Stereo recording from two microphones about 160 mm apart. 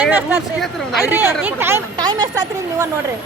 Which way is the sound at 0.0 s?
10° right (ahead or behind).